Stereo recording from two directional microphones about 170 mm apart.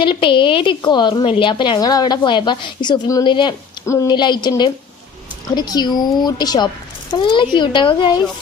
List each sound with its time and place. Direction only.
0.0 s a woman's voice: 30° left (ahead or behind)